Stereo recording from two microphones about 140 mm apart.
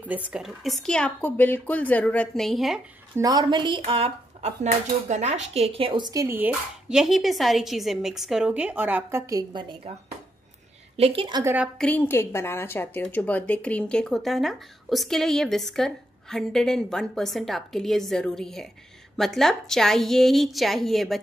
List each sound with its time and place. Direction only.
0.3 s a woman's voice: centre (ahead or behind)
3.2 s speech: 25° right (ahead or behind)
6.2 s a woman's voice: 15° right (ahead or behind)
6.9 s a woman's voice: centre (ahead or behind); by 9.9 s 35° right (ahead or behind)
11.0 s speech: 40° right (ahead or behind)
11.4 s a woman's voice: 10° right (ahead or behind)
11.8 s a woman's voice: 15° left (ahead or behind)